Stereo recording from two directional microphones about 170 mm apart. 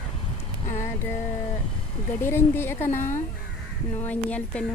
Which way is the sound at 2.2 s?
15° left (ahead or behind).